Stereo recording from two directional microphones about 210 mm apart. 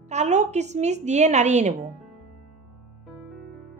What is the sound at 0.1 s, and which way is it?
Speech, 35° right (ahead or behind).